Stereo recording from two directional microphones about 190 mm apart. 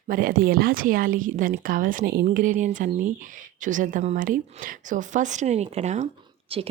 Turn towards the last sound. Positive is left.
turn(degrees=-30)  # may be behind; listen again after turning